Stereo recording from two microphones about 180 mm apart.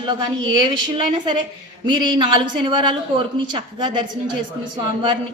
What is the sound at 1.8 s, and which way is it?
Speech, 25° right (ahead or behind).